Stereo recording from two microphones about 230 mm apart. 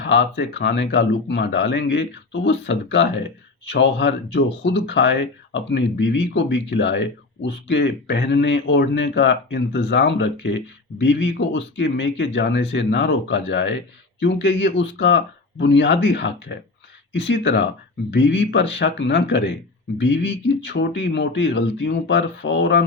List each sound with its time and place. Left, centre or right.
0.0 s speech: left